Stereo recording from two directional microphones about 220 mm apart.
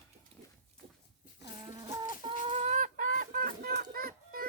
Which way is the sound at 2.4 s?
30° right (ahead or behind).